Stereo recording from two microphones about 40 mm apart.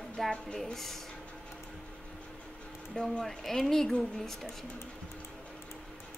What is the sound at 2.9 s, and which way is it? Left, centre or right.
Speech, centre.